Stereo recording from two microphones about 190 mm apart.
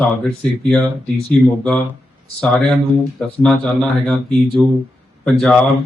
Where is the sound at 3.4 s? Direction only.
Centre (ahead or behind).